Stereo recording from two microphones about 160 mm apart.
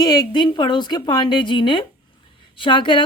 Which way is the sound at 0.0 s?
30° left (ahead or behind).